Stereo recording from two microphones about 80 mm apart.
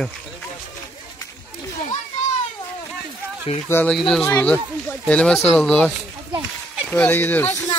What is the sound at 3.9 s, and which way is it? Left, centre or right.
Speech, centre.